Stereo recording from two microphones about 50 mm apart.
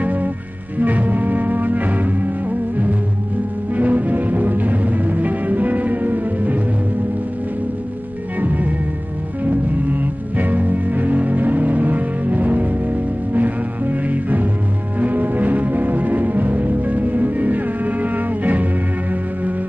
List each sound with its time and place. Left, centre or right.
0.0 s music: right
3.7 s music: right
8.4 s music: right